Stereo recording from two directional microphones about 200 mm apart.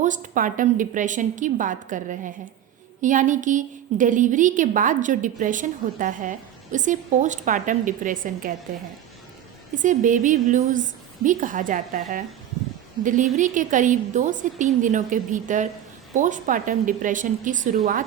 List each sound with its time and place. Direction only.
0.0 s a woman's voice: 40° right (ahead or behind)
9.7 s a woman's voice: 40° right (ahead or behind)
13.3 s a woman's voice: 40° right (ahead or behind)